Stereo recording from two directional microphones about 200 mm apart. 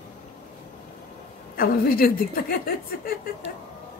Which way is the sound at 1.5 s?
45° left (ahead or behind).